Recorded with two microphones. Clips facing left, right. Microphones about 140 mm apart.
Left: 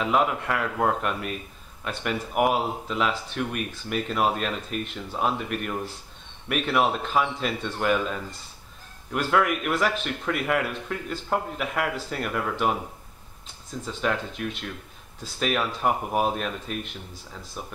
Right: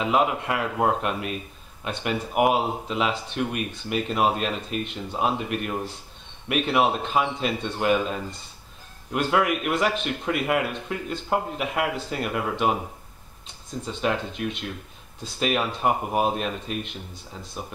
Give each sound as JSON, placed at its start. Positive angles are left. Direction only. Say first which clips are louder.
{"t": 0.0, "sound": "speech", "louder": "right 1 dB", "side_deg": -10}
{"t": 13.8, "sound": "speech", "louder": "right 1 dB", "side_deg": -20}